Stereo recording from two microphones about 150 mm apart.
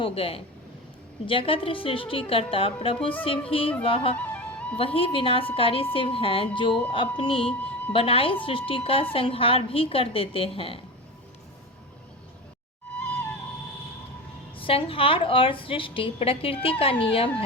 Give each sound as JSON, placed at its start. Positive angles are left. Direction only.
{"t": 0.0, "sound": "a woman's voice", "side_deg": 40}
{"t": 4.3, "sound": "music", "side_deg": 10}
{"t": 4.8, "sound": "a woman's voice", "side_deg": 40}
{"t": 14.5, "sound": "a woman's voice", "side_deg": 35}